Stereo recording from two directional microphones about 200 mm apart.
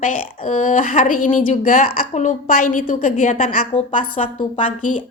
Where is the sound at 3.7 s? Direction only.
25° left (ahead or behind).